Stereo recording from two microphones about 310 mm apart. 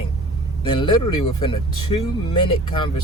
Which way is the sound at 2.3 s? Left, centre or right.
Centre.